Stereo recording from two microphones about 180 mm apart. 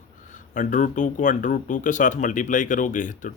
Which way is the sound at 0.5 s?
45° left (ahead or behind).